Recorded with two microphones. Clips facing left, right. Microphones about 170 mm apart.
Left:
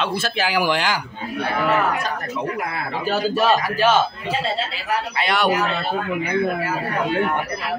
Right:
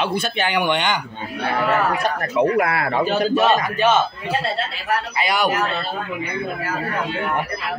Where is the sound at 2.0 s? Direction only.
70° right (ahead or behind).